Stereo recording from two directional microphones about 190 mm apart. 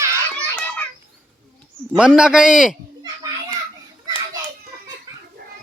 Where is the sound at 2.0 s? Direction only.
5° right (ahead or behind).